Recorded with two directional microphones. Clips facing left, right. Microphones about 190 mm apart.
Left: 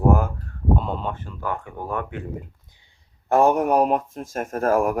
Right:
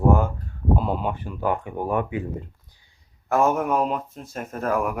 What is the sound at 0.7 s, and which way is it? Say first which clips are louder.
Speech: right 2 dB; 5° right (ahead or behind).